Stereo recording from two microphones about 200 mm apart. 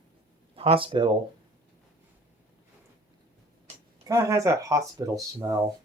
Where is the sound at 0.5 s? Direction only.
30° right (ahead or behind).